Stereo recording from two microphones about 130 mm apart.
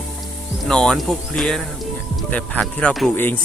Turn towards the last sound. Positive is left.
turn(degrees=15)  # may be behind; listen again after turning